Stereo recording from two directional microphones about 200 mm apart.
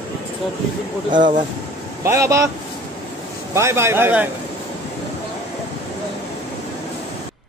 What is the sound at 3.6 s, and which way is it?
Speech, 15° right (ahead or behind).